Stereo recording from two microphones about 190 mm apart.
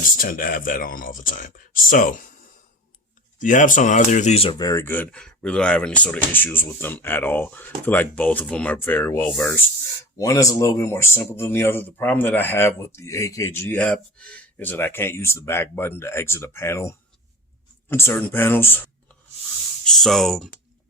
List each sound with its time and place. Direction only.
0.0 s speech: 45° left (ahead or behind)
3.3 s speech: 40° left (ahead or behind); by 18.8 s 10° left (ahead or behind)
19.8 s speech: centre (ahead or behind)